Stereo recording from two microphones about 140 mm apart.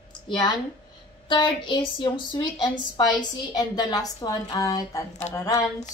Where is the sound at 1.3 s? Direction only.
35° left (ahead or behind).